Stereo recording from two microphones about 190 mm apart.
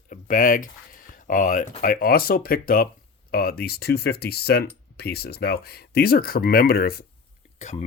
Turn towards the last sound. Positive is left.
turn(degrees=35)  # may be behind; listen again after turning